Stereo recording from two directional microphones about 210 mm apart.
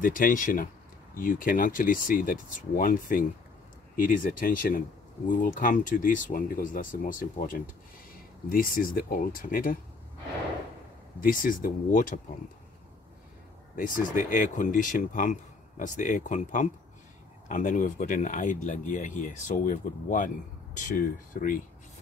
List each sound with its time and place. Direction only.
0.0 s speech: 40° left (ahead or behind)
11.1 s speech: 40° left (ahead or behind)
13.7 s speech: 40° left (ahead or behind)